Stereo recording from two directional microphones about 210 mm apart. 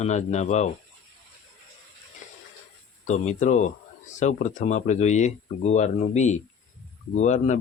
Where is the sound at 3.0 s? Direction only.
35° left (ahead or behind).